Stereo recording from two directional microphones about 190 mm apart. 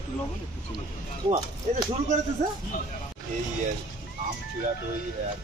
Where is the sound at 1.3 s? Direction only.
20° right (ahead or behind).